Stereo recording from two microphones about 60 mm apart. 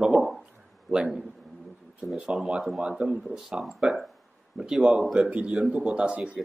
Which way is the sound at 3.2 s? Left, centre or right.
Centre.